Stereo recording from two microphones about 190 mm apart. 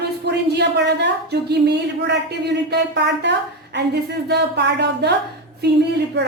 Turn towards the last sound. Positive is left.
turn(degrees=-65)  # may be behind; listen again after turning